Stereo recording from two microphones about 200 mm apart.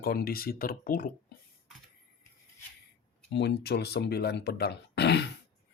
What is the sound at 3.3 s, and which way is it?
Speech, 60° left (ahead or behind).